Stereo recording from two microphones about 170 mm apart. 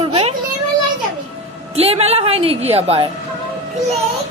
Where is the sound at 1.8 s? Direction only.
35° right (ahead or behind).